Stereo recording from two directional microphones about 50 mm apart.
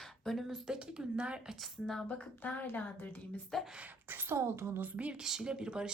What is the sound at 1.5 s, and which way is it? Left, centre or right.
Speech, centre.